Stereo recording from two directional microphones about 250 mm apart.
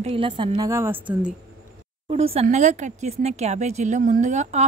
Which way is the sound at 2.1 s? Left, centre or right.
Right.